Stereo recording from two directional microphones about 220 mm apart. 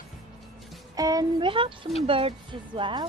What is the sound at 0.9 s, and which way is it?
Speech, 15° right (ahead or behind).